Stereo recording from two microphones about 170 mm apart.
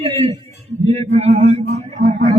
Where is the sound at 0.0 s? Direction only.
35° right (ahead or behind).